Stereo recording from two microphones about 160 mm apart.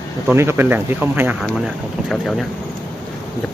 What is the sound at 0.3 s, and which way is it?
Speech, 15° right (ahead or behind).